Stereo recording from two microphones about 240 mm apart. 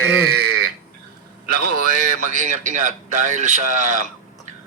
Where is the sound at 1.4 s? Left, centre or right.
Right.